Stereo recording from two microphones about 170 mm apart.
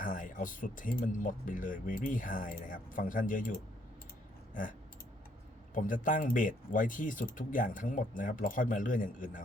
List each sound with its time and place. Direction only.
0.0 s speech: 50° left (ahead or behind)
5.7 s speech: 50° left (ahead or behind)